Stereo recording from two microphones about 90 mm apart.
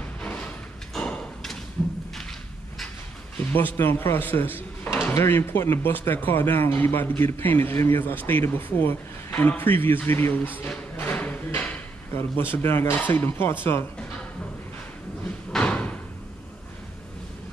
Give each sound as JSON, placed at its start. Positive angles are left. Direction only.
{"t": 0.2, "sound": "a sound", "side_deg": 15}
{"t": 0.9, "sound": "thump", "side_deg": 10}
{"t": 3.3, "sound": "speech", "side_deg": 20}
{"t": 4.8, "sound": "drawer open or close", "side_deg": 20}
{"t": 5.1, "sound": "speech", "side_deg": 25}
{"t": 11.1, "sound": "a sound", "side_deg": 15}
{"t": 12.2, "sound": "speech", "side_deg": 25}
{"t": 15.5, "sound": "door", "side_deg": 10}